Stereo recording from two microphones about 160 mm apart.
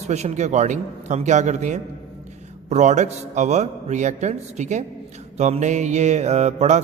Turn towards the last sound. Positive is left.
turn(degrees=-45)  # may be behind; listen again after turning